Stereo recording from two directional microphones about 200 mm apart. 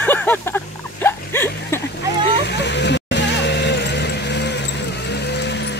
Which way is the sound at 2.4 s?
60° left (ahead or behind).